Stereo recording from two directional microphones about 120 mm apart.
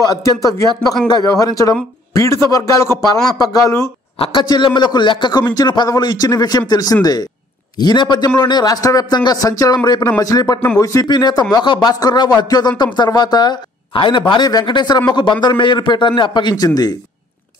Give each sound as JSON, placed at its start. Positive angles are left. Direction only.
{"t": 0.0, "sound": "a man's voice", "side_deg": 30}
{"t": 4.2, "sound": "a man's voice", "side_deg": 40}